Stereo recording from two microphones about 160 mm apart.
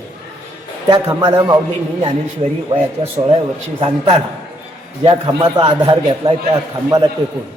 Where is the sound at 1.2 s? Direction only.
25° right (ahead or behind).